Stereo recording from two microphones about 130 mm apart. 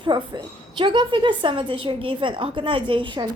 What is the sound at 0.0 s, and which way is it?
A woman's voice, 35° right (ahead or behind).